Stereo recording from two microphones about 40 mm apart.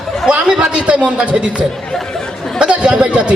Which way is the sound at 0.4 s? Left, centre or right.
Right.